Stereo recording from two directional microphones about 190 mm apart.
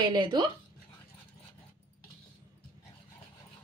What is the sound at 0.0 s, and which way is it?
Speech, 25° right (ahead or behind).